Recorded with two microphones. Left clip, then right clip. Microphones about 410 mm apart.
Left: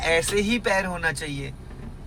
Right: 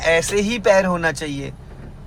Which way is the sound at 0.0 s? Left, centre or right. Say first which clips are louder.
Right 5 dB; centre.